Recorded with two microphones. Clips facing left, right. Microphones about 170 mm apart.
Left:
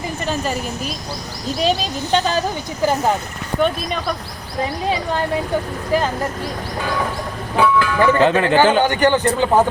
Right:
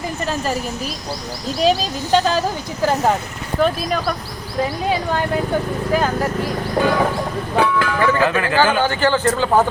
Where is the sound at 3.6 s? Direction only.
5° right (ahead or behind).